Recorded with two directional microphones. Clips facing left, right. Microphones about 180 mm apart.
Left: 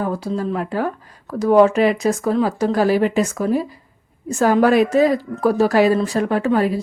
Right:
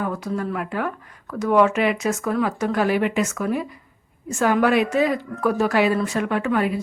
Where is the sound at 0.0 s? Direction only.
30° left (ahead or behind).